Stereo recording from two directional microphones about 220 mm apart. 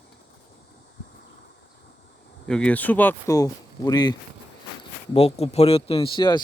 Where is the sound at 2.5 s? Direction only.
5° left (ahead or behind).